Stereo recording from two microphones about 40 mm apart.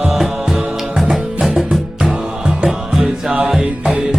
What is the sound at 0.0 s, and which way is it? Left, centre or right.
Music, centre.